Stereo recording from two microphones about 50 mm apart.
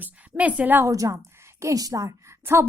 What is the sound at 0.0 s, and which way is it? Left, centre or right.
Speech, right.